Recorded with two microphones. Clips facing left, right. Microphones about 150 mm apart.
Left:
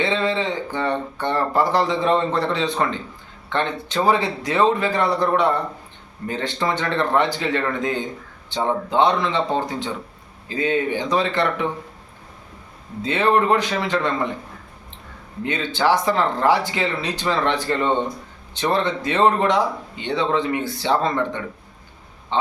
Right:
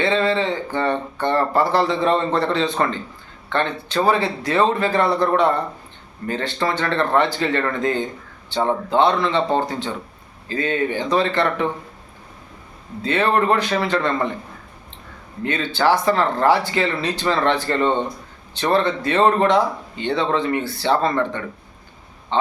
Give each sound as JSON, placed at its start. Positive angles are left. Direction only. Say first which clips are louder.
{"t": 0.0, "sound": "speech", "louder": "right 2 dB", "side_deg": 15}
{"t": 13.0, "sound": "speech", "louder": "even", "side_deg": 15}
{"t": 15.4, "sound": "speech", "louder": "right 1 dB", "side_deg": 15}